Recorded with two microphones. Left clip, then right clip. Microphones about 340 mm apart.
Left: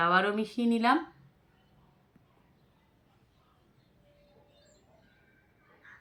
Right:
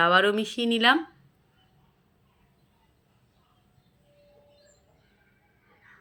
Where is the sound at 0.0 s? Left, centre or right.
Centre.